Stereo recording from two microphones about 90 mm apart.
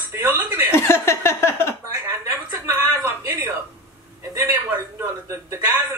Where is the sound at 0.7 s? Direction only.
30° left (ahead or behind).